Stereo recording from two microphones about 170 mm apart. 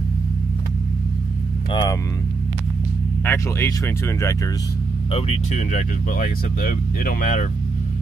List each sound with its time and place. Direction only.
1.7 s speech: 25° left (ahead or behind)
3.3 s speech: 15° left (ahead or behind)
5.1 s speech: 40° left (ahead or behind)